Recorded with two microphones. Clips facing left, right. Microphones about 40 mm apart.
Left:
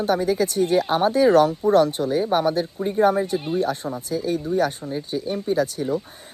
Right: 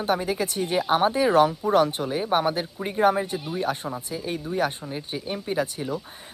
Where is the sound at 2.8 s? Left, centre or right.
Right.